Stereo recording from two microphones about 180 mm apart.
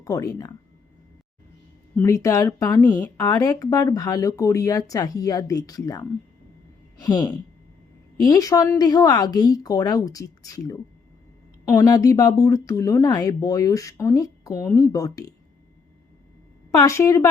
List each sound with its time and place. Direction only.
0.0 s speech: 20° left (ahead or behind)
2.0 s speech: 15° left (ahead or behind)
16.7 s a woman's voice: 15° left (ahead or behind)